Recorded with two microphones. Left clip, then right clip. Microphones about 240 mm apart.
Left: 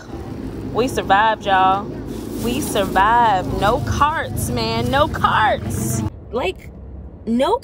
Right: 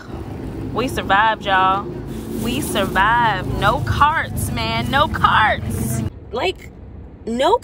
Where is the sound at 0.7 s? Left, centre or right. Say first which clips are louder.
Left 1 dB; centre.